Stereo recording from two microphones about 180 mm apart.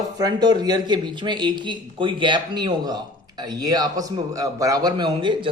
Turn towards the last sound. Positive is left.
turn(degrees=-25)  # may be behind; listen again after turning